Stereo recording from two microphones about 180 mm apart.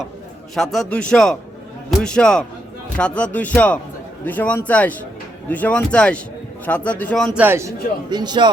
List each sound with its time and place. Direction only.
0.5 s a man's voice: centre (ahead or behind)
7.3 s speech: 15° right (ahead or behind)
8.1 s a man's voice: 25° right (ahead or behind)